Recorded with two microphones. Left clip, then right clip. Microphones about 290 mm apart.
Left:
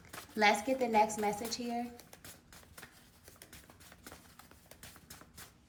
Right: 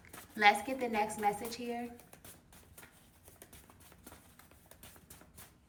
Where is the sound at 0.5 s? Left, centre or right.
Centre.